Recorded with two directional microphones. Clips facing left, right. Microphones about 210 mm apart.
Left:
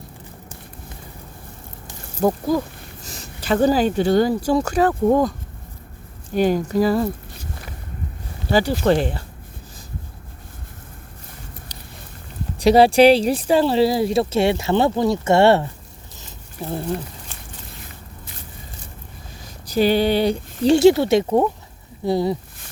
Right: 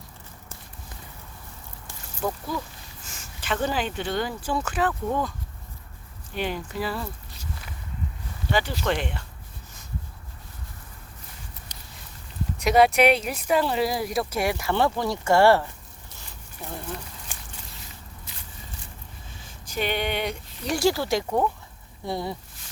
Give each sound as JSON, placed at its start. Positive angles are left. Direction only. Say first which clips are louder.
{"t": 2.2, "sound": "a sound", "louder": "left 10 dB", "side_deg": 40}
{"t": 3.4, "sound": "speech", "louder": "left 10 dB", "side_deg": 35}
{"t": 6.3, "sound": "speech", "louder": "left 12 dB", "side_deg": 40}
{"t": 11.7, "sound": "a sound", "louder": "left 6 dB", "side_deg": 35}
{"t": 12.5, "sound": "speech", "louder": "left 6 dB", "side_deg": 30}
{"t": 19.4, "sound": "speech", "louder": "left 11 dB", "side_deg": 40}